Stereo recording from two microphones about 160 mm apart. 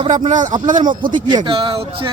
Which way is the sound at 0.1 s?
50° right (ahead or behind).